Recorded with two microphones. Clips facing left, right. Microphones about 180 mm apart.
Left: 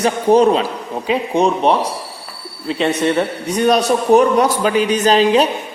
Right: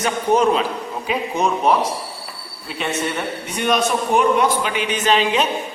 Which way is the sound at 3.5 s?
35° left (ahead or behind).